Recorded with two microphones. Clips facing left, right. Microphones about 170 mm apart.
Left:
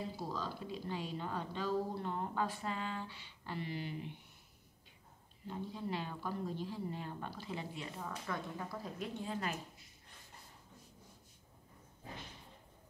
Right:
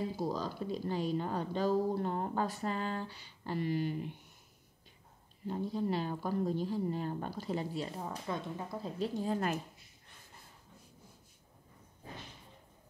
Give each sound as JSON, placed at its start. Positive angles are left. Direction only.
{"t": 0.3, "sound": "speech", "side_deg": -40}
{"t": 5.5, "sound": "a woman's voice", "side_deg": -40}